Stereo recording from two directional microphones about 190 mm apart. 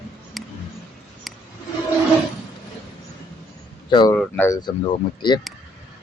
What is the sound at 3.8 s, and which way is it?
Speech, 25° left (ahead or behind).